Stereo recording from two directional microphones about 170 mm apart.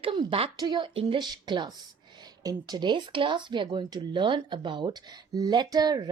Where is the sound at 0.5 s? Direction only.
20° right (ahead or behind).